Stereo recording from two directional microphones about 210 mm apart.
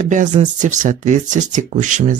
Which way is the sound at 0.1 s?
35° right (ahead or behind).